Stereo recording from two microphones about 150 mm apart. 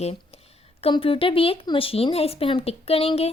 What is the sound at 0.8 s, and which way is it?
Speech, 35° left (ahead or behind).